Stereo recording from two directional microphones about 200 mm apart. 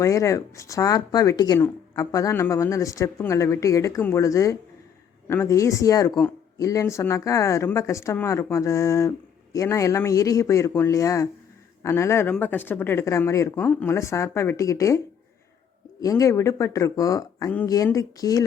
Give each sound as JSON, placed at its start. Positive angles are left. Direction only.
{"t": 0.0, "sound": "speech", "side_deg": 15}